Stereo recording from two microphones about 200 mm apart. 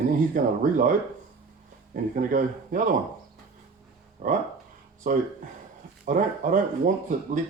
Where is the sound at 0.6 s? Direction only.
40° right (ahead or behind).